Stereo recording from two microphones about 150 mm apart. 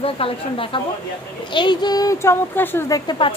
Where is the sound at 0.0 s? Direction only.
40° left (ahead or behind); by 3.0 s 15° left (ahead or behind).